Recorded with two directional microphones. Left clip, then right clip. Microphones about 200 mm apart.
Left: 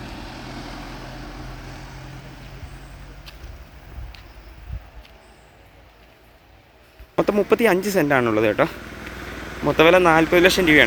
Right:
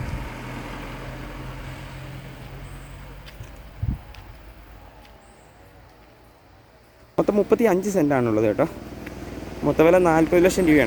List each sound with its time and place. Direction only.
0.0 s vehicle: 40° right (ahead or behind)
0.5 s vehicle: 65° right (ahead or behind); by 1.7 s 50° right (ahead or behind)
7.2 s speech: 5° right (ahead or behind)
9.7 s speech: 10° right (ahead or behind)